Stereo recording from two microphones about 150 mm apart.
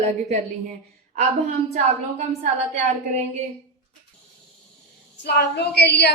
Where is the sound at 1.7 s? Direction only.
50° right (ahead or behind).